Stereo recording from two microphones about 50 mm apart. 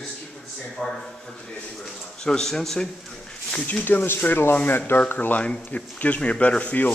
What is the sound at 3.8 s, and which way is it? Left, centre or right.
Speech, left.